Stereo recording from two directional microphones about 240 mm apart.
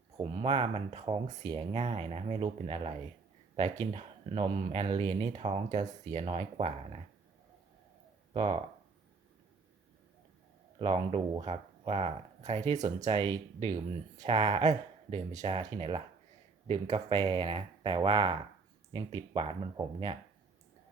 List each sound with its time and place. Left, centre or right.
0.2 s speech: right
8.3 s speech: right
10.8 s speech: right
15.1 s speech: right